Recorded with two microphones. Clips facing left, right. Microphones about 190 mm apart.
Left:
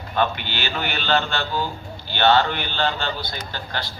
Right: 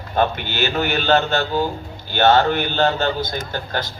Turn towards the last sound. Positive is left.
turn(degrees=-45)  # may be behind; listen again after turning